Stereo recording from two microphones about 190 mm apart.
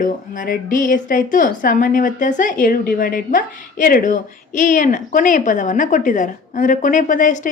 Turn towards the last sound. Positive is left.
turn(degrees=40)  # may be behind; listen again after turning